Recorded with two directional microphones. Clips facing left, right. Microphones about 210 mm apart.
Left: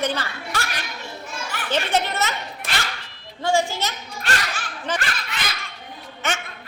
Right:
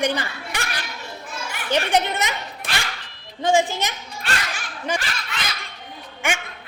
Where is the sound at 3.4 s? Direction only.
20° right (ahead or behind).